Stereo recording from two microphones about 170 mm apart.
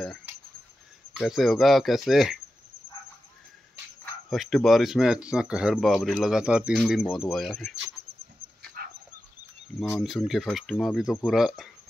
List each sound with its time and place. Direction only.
1.1 s speech: centre (ahead or behind)
4.0 s speech: centre (ahead or behind)
8.8 s dog: 60° right (ahead or behind)
9.8 s speech: 5° left (ahead or behind)